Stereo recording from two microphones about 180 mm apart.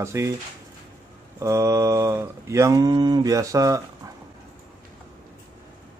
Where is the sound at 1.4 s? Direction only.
15° right (ahead or behind).